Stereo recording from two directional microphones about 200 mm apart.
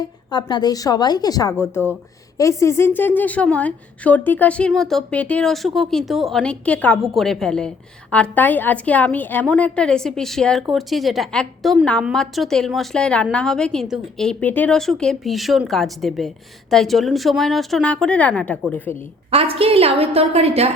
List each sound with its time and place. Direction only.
0.0 s a woman's voice: 20° left (ahead or behind)
19.3 s a woman's voice: 30° right (ahead or behind)